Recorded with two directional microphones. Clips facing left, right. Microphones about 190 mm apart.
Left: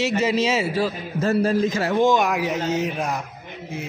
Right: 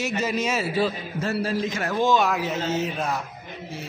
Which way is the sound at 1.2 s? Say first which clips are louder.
Left 6 dB; 45° left (ahead or behind).